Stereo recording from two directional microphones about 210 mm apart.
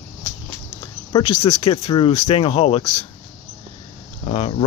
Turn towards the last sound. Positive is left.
turn(degrees=30)  # may be behind; listen again after turning